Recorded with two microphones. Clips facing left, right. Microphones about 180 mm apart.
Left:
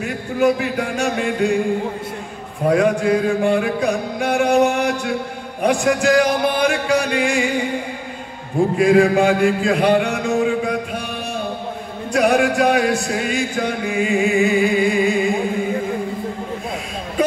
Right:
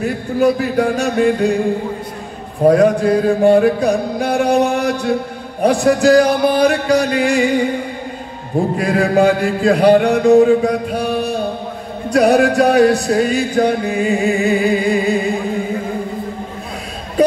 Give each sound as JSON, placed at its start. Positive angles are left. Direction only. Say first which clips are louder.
{"t": 0.0, "sound": "speech", "louder": "right 3 dB", "side_deg": -35}
{"t": 2.6, "sound": "speech", "louder": "right 5 dB", "side_deg": -35}
{"t": 8.7, "sound": "speech", "louder": "left 2 dB", "side_deg": -40}